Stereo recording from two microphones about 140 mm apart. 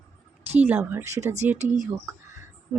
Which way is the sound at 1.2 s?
50° right (ahead or behind).